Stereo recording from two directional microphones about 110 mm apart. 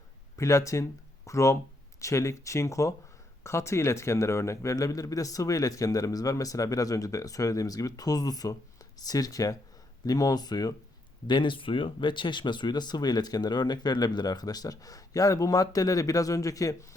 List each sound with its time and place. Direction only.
0.3 s speech: 30° left (ahead or behind)